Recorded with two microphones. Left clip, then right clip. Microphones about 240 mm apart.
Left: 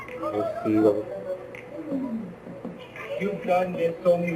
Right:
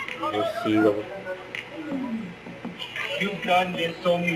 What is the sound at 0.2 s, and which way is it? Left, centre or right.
Speech, centre.